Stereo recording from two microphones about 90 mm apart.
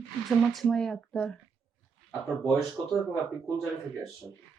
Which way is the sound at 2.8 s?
25° right (ahead or behind).